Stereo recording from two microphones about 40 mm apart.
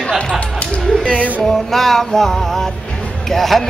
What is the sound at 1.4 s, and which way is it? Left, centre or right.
Music, centre.